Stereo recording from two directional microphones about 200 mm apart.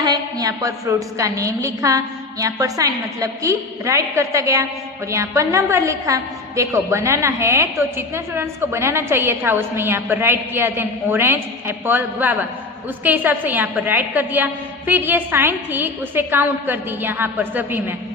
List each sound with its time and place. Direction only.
0.0 s a woman's voice: 20° right (ahead or behind)